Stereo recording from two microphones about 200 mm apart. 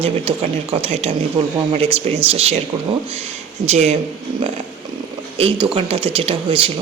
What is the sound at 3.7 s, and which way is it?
Speech, 35° right (ahead or behind).